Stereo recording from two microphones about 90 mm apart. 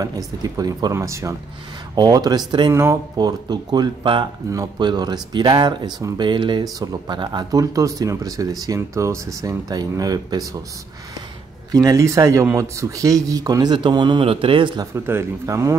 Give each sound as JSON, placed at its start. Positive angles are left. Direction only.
{"t": 0.0, "sound": "speech", "side_deg": -45}
{"t": 0.9, "sound": "speech", "side_deg": -35}
{"t": 2.0, "sound": "speech", "side_deg": -45}
{"t": 2.7, "sound": "speech", "side_deg": -30}
{"t": 3.2, "sound": "speech", "side_deg": -50}
{"t": 4.7, "sound": "speech", "side_deg": -50}
{"t": 7.5, "sound": "speech", "side_deg": -40}
{"t": 11.7, "sound": "speech", "side_deg": -40}
{"t": 15.0, "sound": "speech", "side_deg": -30}